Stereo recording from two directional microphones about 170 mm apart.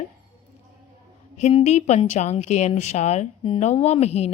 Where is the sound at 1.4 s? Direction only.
40° left (ahead or behind).